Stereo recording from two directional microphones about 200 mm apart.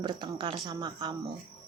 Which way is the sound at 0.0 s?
25° right (ahead or behind).